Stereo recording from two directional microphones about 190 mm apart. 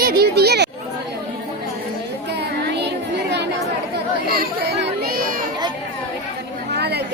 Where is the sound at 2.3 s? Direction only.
65° right (ahead or behind).